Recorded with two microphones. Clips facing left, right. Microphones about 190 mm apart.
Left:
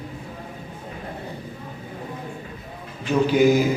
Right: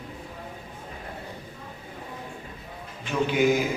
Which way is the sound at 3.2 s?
35° left (ahead or behind).